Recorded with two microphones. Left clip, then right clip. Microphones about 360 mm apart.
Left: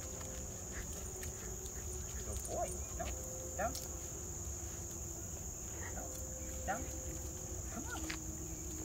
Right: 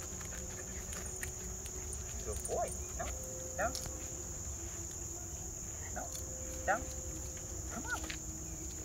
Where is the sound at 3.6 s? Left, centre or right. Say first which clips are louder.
Right 3 dB; centre.